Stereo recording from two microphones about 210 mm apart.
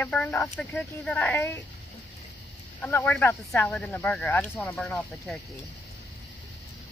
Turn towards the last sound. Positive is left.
turn(degrees=0)  # may be behind; listen again after turning